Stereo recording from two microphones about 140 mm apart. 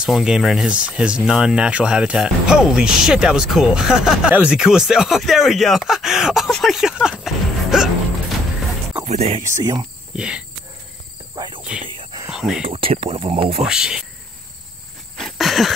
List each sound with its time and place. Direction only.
0.0 s speech: 5° right (ahead or behind)
9.0 s speech: 50° right (ahead or behind)
9.6 s speech: 25° right (ahead or behind)
10.1 s cricket: 5° right (ahead or behind)
11.3 s cricket: 30° right (ahead or behind)
11.8 s a sound: 35° right (ahead or behind)
12.3 s a sound: 5° right (ahead or behind)
12.6 s speech: 45° right (ahead or behind)
13.7 s speech: 5° right (ahead or behind)
15.1 s a sound: centre (ahead or behind)